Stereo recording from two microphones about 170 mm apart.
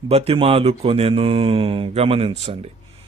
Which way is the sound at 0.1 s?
35° right (ahead or behind).